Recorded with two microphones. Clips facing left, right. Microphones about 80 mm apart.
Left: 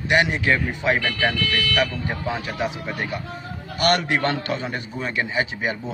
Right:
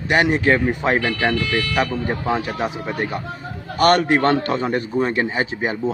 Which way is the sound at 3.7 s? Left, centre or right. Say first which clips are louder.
Right 5 dB; right.